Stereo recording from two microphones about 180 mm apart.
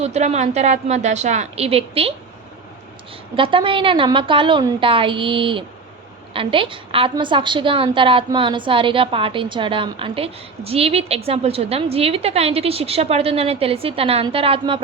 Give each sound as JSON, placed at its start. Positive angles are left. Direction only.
{"t": 0.0, "sound": "a woman's voice", "side_deg": -40}
{"t": 3.3, "sound": "a woman's voice", "side_deg": -30}